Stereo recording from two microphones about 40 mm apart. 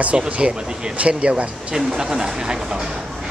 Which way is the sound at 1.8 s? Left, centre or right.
Centre.